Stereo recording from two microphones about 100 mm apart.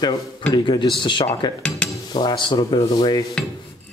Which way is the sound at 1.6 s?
5° left (ahead or behind).